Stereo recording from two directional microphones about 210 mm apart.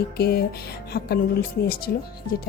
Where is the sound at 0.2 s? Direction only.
50° left (ahead or behind).